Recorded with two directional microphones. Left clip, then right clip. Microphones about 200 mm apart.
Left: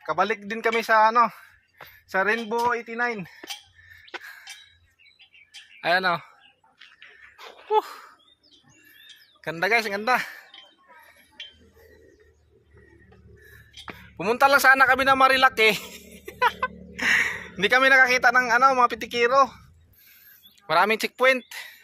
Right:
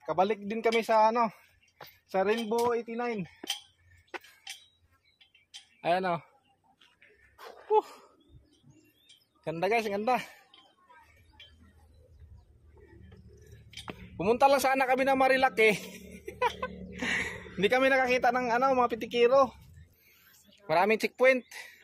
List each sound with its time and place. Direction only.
0.0 s speech: centre (ahead or behind)
4.1 s a sound: 20° left (ahead or behind)
5.8 s speech: 5° left (ahead or behind)
7.3 s a sound: 15° left (ahead or behind)
7.7 s speech: centre (ahead or behind)
9.4 s speech: centre (ahead or behind)
13.8 s a man's voice: centre (ahead or behind); by 19.6 s 15° right (ahead or behind)
20.6 s speech: centre (ahead or behind)